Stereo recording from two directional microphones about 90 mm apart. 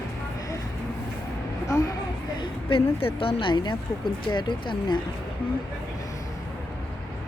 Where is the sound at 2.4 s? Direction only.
70° left (ahead or behind).